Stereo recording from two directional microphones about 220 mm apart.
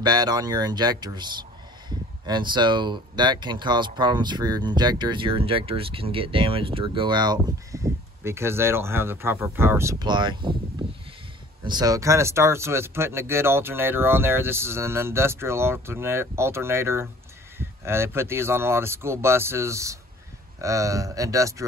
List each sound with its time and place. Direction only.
0.0 s speech: 20° right (ahead or behind)
10.8 s a sound: 25° right (ahead or behind)
11.6 s speech: 20° right (ahead or behind)